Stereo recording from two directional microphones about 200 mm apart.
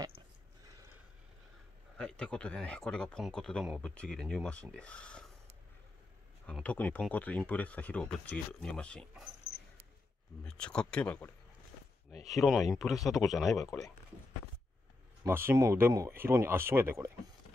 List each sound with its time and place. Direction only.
2.0 s speech: 5° left (ahead or behind)
6.4 s speech: 5° left (ahead or behind)
10.4 s speech: 5° left (ahead or behind)
12.1 s speech: 30° right (ahead or behind)
12.4 s speech: centre (ahead or behind)
13.7 s speech: 15° left (ahead or behind)
15.2 s speech: 10° right (ahead or behind)